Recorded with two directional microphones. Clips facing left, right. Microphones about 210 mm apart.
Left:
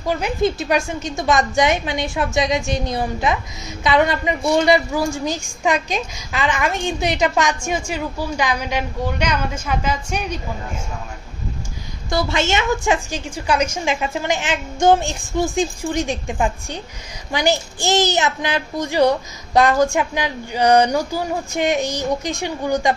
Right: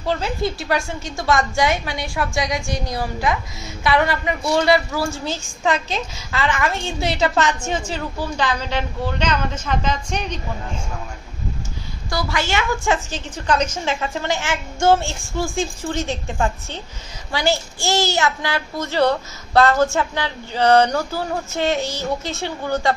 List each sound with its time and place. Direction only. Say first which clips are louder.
0.0 s a woman's voice: left 3 dB; 15° left (ahead or behind)
12.1 s a woman's voice: left 3 dB; 25° left (ahead or behind)